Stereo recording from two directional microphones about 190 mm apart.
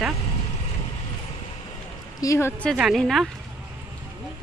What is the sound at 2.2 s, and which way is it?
Speech, 15° left (ahead or behind).